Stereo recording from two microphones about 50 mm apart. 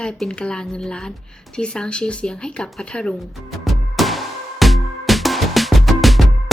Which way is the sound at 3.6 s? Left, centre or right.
Centre.